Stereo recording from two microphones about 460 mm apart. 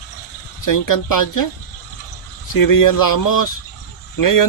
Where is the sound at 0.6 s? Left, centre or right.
Left.